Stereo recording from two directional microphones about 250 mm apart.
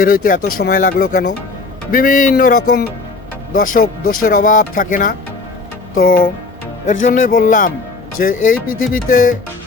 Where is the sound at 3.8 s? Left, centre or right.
Left.